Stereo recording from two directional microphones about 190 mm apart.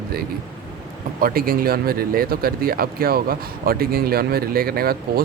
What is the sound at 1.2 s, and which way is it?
Speech, 50° right (ahead or behind).